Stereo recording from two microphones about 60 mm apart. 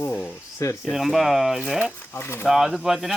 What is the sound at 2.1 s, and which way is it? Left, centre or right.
Speech, left.